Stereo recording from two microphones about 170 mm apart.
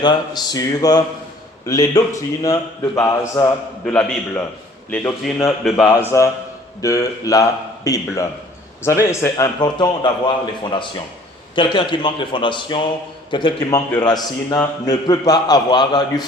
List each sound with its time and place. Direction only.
0.0 s a man's voice: 25° left (ahead or behind); by 5.9 s centre (ahead or behind)
5.9 s a man's voice: 15° left (ahead or behind)